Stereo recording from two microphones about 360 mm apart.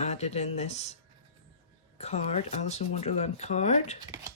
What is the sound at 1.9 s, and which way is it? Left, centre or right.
Speech, centre.